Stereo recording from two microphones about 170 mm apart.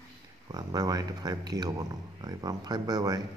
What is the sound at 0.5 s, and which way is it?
A man's voice, 20° right (ahead or behind).